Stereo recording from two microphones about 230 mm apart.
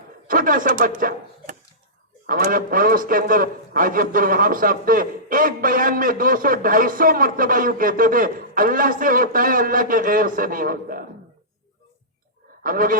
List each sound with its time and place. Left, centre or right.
0.3 s a man's voice: right
12.6 s a man's voice: right